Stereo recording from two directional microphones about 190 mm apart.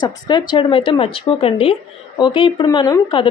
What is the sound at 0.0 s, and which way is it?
A woman's voice, 25° left (ahead or behind).